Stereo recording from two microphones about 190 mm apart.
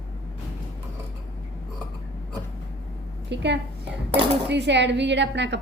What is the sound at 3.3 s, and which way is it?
A woman's voice, 65° right (ahead or behind).